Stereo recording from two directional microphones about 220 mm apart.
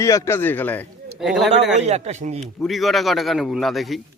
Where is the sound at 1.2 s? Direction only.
5° right (ahead or behind).